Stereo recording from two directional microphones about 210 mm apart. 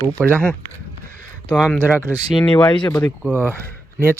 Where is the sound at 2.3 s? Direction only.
5° left (ahead or behind).